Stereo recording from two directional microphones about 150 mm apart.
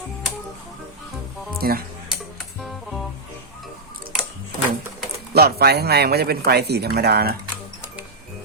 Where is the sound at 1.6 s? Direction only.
85° right.